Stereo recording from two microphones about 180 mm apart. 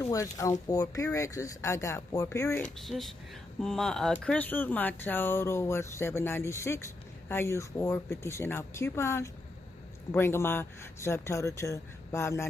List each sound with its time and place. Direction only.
0.0 s speech: 15° left (ahead or behind)
2.6 s speech: centre (ahead or behind)